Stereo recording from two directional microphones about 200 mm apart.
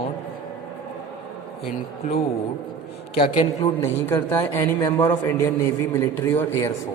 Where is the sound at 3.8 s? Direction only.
10° left (ahead or behind).